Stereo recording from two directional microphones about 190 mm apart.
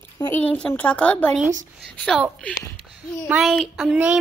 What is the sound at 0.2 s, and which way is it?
A woman's voice, 10° left (ahead or behind).